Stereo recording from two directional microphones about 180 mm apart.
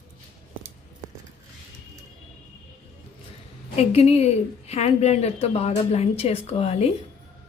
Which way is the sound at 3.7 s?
35° left (ahead or behind).